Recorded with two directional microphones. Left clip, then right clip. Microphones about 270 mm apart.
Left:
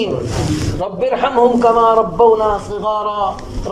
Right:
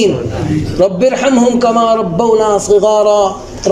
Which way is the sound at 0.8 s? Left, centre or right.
Right.